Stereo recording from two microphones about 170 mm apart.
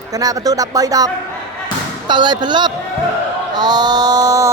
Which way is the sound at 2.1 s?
25° right (ahead or behind).